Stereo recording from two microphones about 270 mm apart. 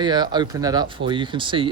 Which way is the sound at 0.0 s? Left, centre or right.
Centre.